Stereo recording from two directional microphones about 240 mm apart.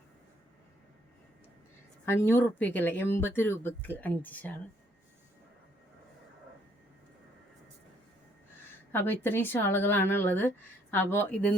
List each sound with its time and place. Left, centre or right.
2.0 s speech: centre
8.9 s speech: centre